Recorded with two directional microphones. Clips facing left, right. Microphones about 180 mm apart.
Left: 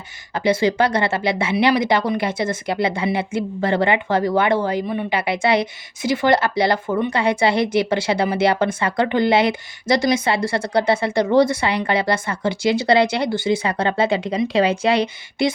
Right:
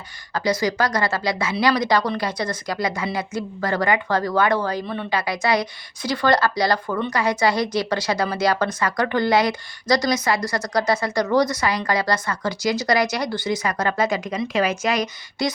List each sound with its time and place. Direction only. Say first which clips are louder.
0.3 s speech: left 4 dB; 25° left (ahead or behind)